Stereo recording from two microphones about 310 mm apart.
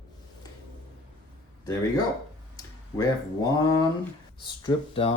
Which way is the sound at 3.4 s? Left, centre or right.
Centre.